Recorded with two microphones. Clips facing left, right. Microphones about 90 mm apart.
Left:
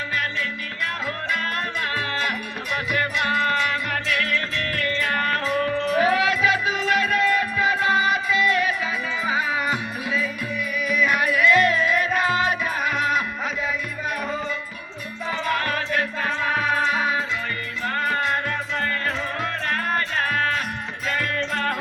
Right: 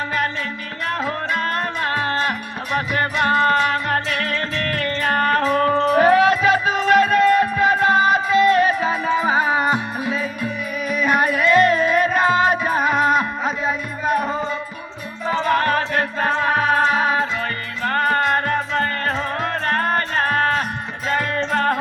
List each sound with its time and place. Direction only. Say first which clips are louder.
1.0 s music: right 5 dB; 35° right (ahead or behind)
4.8 s music: right 4 dB; 35° right (ahead or behind)